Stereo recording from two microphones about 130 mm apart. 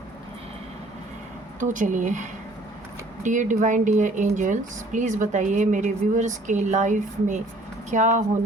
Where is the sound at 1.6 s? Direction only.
80° right.